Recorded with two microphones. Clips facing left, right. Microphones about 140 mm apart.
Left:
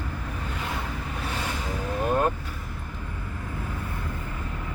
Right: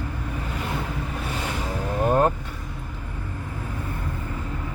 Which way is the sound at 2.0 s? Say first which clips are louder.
Right 4 dB; 35° right (ahead or behind).